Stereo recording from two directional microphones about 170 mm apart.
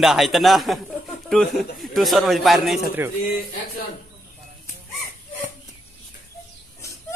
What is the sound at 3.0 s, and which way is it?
Speech, 10° right (ahead or behind).